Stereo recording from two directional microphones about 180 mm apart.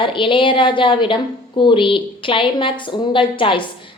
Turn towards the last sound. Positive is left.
turn(degrees=30)  # may be behind; listen again after turning